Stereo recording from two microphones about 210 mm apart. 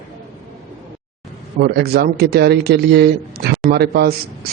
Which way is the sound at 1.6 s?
50° right (ahead or behind).